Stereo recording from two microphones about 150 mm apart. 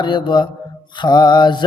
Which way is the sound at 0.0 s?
30° left (ahead or behind).